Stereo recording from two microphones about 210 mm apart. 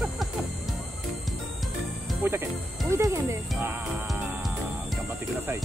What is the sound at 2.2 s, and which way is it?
Speech, 10° right (ahead or behind).